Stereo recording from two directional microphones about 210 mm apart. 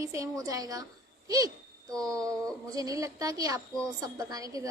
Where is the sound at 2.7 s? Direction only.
15° right (ahead or behind).